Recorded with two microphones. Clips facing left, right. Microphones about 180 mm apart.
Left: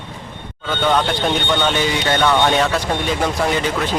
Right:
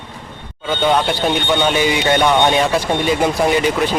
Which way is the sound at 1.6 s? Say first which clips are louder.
Right 3 dB; 10° right (ahead or behind).